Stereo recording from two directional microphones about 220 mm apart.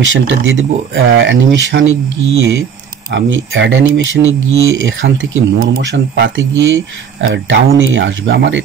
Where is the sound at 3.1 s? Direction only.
60° right (ahead or behind).